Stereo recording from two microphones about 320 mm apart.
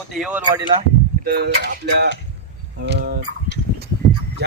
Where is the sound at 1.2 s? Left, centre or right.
Right.